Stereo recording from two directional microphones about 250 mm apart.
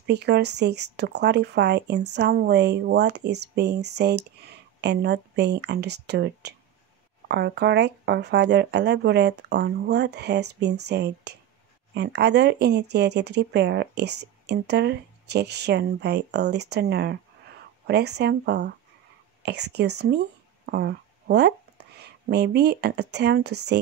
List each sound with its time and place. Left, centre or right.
0.0 s speech: right